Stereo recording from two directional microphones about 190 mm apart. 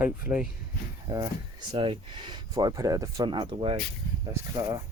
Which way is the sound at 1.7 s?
25° right (ahead or behind).